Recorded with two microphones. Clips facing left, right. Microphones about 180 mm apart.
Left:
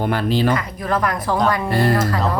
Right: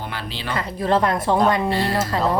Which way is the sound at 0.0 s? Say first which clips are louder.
Left 12 dB; 50° left (ahead or behind).